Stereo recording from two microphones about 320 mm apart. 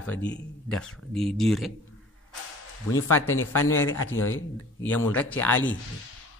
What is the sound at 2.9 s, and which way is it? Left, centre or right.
A man's voice, left.